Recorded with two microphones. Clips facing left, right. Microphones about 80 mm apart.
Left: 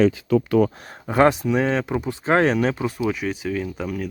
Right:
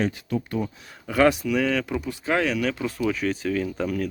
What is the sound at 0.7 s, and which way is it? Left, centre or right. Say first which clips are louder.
Speech: left 3 dB; left.